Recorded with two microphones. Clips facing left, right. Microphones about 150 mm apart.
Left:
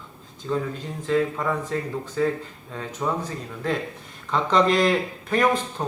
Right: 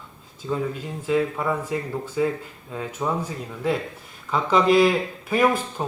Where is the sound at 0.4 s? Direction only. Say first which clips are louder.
Even; 10° right (ahead or behind).